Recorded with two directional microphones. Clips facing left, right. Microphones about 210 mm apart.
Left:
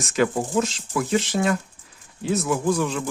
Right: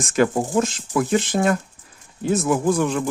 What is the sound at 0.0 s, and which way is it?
Speech, 50° right (ahead or behind).